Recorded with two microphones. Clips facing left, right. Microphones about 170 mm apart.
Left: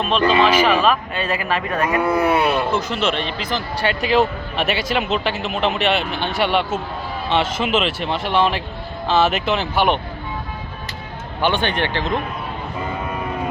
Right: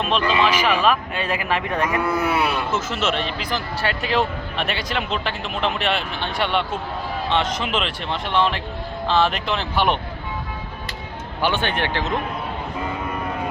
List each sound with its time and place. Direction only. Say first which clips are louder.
0.4 s speech: left 3 dB; 10° right (ahead or behind)
1.9 s speech: left 7 dB; 25° left (ahead or behind)
2.7 s speech: left 2 dB; 5° right (ahead or behind)
11.4 s speech: left 2 dB; 5° right (ahead or behind)